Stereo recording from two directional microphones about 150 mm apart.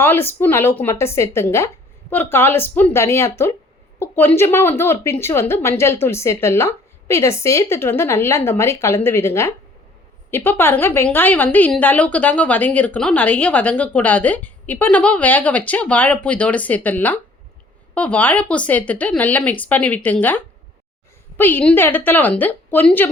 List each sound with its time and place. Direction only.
0.0 s a woman's voice: 15° left (ahead or behind)
21.3 s a woman's voice: 15° left (ahead or behind)